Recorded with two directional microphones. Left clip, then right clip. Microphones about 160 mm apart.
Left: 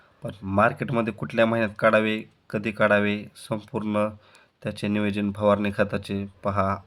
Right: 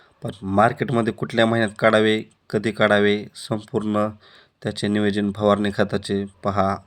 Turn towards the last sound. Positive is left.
turn(degrees=-15)  # may be behind; listen again after turning